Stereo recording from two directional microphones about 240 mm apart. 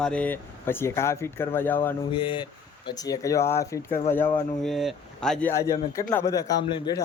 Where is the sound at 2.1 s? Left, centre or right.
Left.